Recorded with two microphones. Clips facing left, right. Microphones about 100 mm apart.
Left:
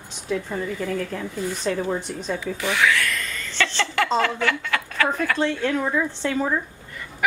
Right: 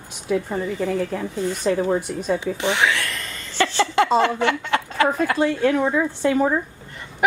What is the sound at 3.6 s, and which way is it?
A woman's voice, 10° right (ahead or behind).